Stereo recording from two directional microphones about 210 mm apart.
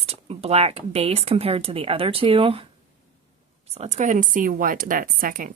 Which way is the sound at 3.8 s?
35° right (ahead or behind).